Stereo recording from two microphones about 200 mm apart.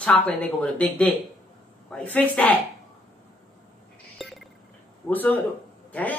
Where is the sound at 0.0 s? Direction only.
5° left (ahead or behind).